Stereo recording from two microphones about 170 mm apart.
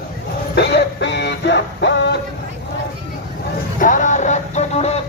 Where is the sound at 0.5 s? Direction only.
80° left.